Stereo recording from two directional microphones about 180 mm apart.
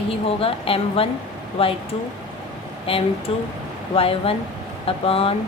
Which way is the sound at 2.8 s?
30° left (ahead or behind).